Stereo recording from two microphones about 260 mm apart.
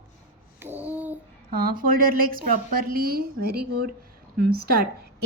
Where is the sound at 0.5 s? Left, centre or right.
Centre.